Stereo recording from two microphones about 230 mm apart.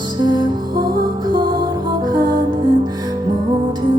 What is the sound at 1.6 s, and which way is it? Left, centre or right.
Music, centre.